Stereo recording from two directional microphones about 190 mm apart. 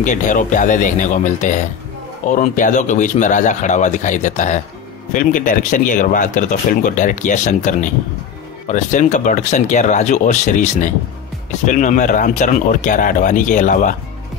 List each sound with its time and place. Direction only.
0.0 s speech: 40° left (ahead or behind)